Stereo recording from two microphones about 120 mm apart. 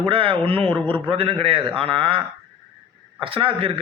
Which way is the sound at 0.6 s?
15° left (ahead or behind).